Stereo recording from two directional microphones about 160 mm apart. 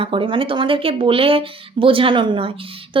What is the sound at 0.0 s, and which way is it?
Speech, 30° right (ahead or behind).